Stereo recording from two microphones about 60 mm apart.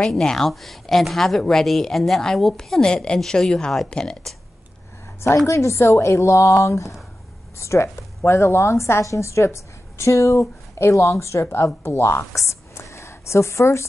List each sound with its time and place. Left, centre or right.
0.0 s speech: centre
5.5 s a woman's voice: left
12.4 s a sound: left